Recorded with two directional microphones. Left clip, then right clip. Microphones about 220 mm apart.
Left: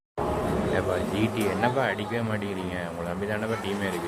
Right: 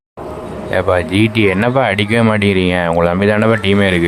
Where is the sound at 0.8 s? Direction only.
45° right (ahead or behind).